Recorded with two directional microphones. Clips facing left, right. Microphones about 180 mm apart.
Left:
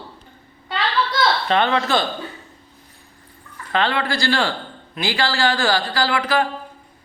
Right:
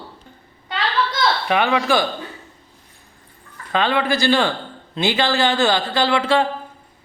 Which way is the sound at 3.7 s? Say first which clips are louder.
Right 2 dB; 15° right (ahead or behind).